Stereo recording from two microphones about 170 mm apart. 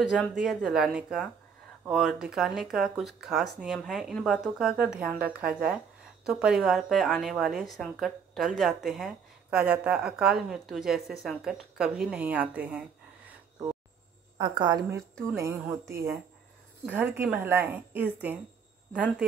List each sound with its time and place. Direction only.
0.1 s speech: centre (ahead or behind)
12.1 s a sound: 10° right (ahead or behind)
14.4 s a woman's voice: 25° right (ahead or behind); by 18.4 s 10° right (ahead or behind)